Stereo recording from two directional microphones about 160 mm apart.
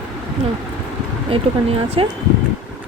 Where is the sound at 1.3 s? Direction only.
35° right (ahead or behind).